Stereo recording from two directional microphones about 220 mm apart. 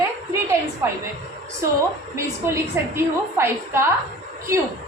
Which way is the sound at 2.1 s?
10° right (ahead or behind).